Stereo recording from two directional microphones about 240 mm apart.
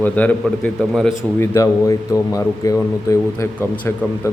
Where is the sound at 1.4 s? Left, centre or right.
Centre.